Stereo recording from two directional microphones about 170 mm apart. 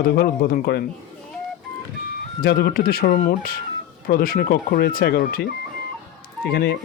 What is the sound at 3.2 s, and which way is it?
Speech, 45° left (ahead or behind).